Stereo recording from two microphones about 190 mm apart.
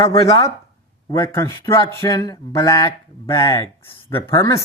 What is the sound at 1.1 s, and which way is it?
Speech, 15° left (ahead or behind).